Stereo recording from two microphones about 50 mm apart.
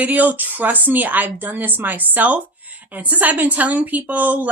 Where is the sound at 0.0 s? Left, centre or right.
Right.